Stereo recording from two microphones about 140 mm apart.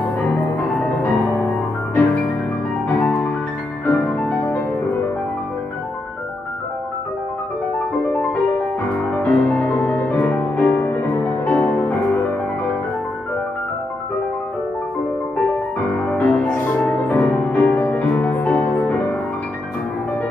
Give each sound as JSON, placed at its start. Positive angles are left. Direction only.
{"t": 0.3, "sound": "music", "side_deg": 5}
{"t": 3.8, "sound": "music", "side_deg": 10}
{"t": 8.1, "sound": "music", "side_deg": 5}
{"t": 16.1, "sound": "music", "side_deg": 10}